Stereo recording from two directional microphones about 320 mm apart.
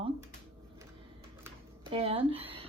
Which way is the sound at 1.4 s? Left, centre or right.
Centre.